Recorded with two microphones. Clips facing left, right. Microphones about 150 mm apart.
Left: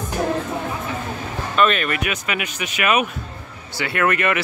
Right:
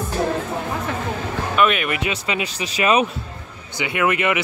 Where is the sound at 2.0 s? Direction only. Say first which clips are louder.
Right 1 dB; 25° right (ahead or behind).